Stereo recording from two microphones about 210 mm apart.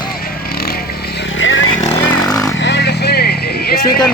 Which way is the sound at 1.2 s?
65° left (ahead or behind).